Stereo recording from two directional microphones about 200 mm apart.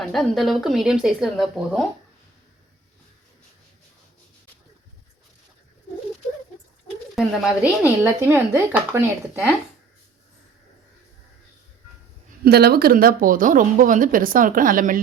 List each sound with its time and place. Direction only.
0.1 s speech: centre (ahead or behind)
7.2 s speech: 10° right (ahead or behind)
12.5 s a woman's voice: 50° right (ahead or behind)